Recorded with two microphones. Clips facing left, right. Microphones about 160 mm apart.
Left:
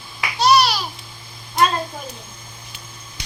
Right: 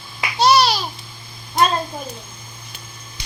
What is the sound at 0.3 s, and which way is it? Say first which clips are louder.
Babbling: right 1 dB; 25° right (ahead or behind).